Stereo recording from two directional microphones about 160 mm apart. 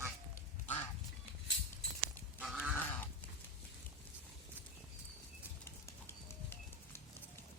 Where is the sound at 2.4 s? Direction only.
5° right (ahead or behind).